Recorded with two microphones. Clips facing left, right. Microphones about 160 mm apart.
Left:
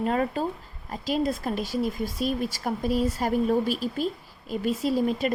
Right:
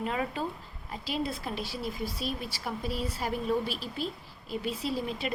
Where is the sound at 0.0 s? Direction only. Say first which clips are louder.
Left 6 dB; 45° left (ahead or behind).